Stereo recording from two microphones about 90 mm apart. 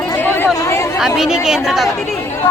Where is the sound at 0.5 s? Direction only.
35° left (ahead or behind).